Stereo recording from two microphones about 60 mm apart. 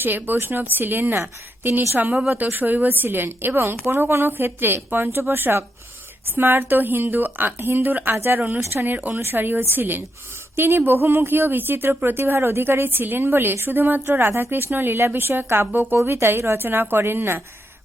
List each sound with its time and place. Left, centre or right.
0.0 s speech: right
2.3 s speech: right
8.4 s speech: right
15.7 s speech: right
16.0 s speech: right